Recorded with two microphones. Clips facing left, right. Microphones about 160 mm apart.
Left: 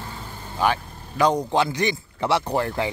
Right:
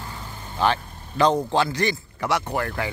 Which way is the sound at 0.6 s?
10° left (ahead or behind).